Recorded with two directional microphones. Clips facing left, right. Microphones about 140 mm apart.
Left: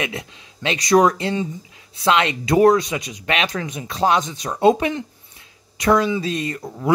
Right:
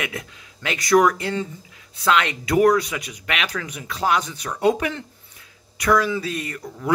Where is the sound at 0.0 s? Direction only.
20° left (ahead or behind).